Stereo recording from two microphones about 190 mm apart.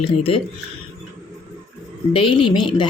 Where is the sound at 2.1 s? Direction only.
25° left (ahead or behind).